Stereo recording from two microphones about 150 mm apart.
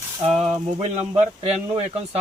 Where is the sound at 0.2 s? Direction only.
45° right (ahead or behind).